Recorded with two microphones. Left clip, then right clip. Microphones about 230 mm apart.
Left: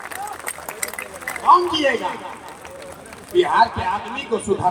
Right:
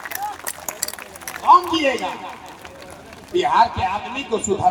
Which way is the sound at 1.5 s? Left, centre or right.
Right.